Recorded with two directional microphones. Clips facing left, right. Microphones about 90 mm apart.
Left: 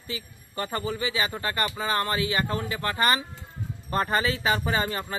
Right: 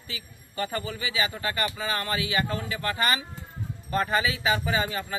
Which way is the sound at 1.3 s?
35° left (ahead or behind).